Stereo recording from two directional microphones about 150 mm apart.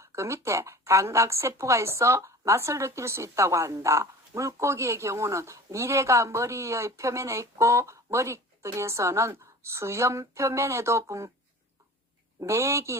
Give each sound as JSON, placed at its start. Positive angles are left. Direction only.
{"t": 0.0, "sound": "a woman's voice", "side_deg": -20}
{"t": 12.4, "sound": "a woman's voice", "side_deg": -20}